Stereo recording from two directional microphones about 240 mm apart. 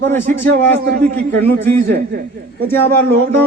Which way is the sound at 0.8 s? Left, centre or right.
Right.